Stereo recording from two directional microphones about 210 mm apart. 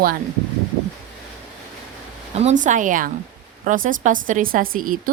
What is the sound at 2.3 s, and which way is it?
A woman's voice, 30° right (ahead or behind).